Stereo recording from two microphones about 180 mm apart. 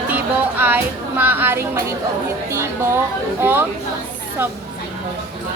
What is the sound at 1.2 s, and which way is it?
Speech, 10° right (ahead or behind).